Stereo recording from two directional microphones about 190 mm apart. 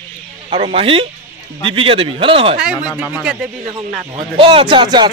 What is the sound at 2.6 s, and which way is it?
Speech, 5° right (ahead or behind).